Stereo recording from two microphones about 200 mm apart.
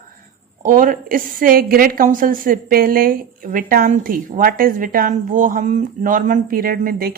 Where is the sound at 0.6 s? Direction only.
40° right (ahead or behind).